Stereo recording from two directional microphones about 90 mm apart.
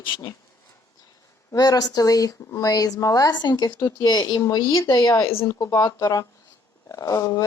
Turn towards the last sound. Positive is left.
turn(degrees=35)  # may be behind; listen again after turning